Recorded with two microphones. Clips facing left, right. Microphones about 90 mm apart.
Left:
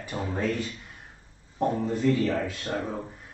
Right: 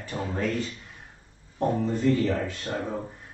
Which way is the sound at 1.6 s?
5° left (ahead or behind).